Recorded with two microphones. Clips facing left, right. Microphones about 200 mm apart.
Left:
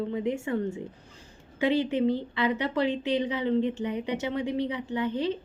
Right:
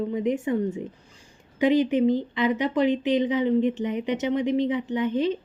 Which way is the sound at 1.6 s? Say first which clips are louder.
Right 5 dB; 15° right (ahead or behind).